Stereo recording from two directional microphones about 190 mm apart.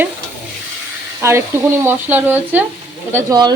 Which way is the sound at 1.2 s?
15° right (ahead or behind).